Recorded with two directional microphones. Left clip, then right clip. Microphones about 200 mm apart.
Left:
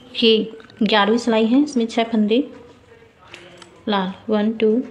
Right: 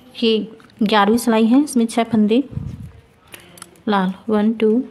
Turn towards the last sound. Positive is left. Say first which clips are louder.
# right 1 dB
turn(degrees=-40)  # may be behind; listen again after turning